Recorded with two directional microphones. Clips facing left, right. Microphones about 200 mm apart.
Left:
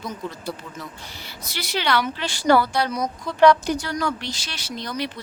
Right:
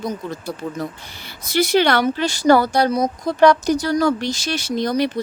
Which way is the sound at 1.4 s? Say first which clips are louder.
Right 10 dB; 50° right (ahead or behind).